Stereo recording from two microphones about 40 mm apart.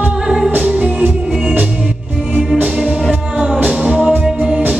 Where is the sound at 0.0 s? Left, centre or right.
Right.